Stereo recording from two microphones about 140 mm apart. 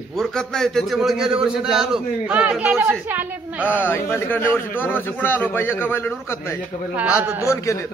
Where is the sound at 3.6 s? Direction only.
15° left (ahead or behind).